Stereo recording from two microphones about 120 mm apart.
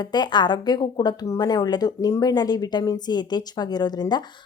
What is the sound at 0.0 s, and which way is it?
A woman's voice, 35° left (ahead or behind).